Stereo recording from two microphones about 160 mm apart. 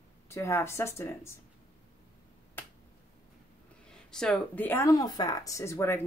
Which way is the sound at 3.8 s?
5° left (ahead or behind).